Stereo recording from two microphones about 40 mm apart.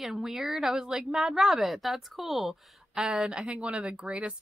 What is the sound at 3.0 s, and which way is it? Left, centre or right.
Speech, right.